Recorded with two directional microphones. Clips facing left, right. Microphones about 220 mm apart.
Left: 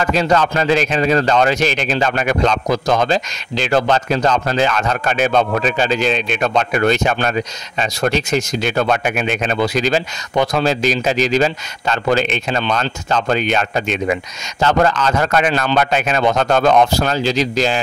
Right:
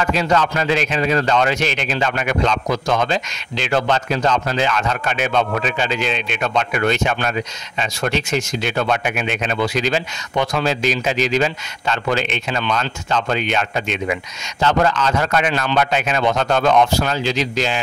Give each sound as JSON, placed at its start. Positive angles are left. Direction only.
{"t": 0.1, "sound": "speech", "side_deg": 40}